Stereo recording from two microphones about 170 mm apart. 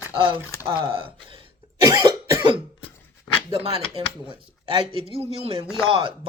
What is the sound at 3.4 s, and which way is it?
Speech, 35° right (ahead or behind).